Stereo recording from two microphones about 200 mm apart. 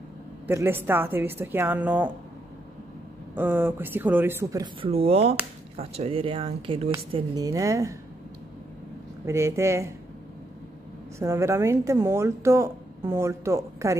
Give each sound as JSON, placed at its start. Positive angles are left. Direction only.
{"t": 0.5, "sound": "speech", "side_deg": -10}
{"t": 3.3, "sound": "speech", "side_deg": -10}
{"t": 4.9, "sound": "speech", "side_deg": -30}
{"t": 7.5, "sound": "speech", "side_deg": -15}
{"t": 9.2, "sound": "speech", "side_deg": -15}
{"t": 11.1, "sound": "speech", "side_deg": -15}